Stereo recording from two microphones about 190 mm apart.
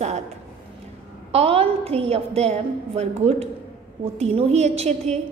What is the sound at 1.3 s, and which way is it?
A woman's voice, 30° right (ahead or behind).